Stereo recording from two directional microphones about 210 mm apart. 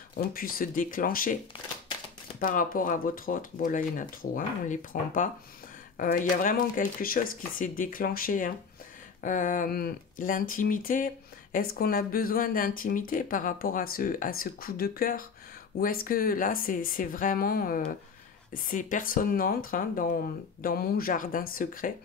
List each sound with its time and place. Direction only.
0.1 s speech: 45° left (ahead or behind)
2.4 s speech: 40° left (ahead or behind)
6.3 s speech: 40° left (ahead or behind)